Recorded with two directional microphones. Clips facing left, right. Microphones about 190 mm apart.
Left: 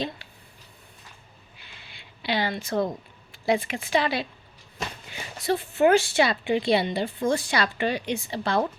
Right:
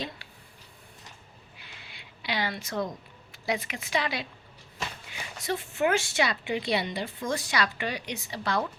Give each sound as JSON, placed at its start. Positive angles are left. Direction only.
{"t": 2.0, "sound": "a woman's voice", "side_deg": 30}